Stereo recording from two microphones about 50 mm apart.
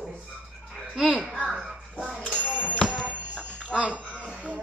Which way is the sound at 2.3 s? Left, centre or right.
Left.